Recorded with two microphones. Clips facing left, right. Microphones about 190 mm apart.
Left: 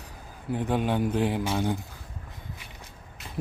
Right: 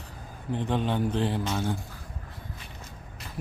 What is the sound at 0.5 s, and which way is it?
A man's voice, 10° left (ahead or behind).